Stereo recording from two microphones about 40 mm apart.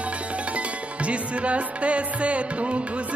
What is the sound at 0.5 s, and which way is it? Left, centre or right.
Music, right.